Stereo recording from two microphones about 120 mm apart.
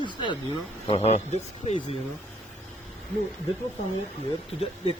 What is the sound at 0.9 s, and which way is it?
Speech, 65° left (ahead or behind).